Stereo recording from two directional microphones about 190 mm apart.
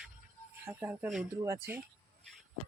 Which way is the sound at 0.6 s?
10° right (ahead or behind).